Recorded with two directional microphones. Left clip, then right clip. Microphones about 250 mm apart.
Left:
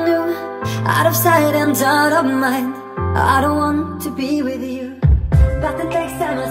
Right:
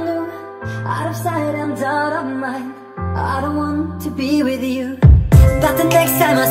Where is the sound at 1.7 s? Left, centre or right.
Left.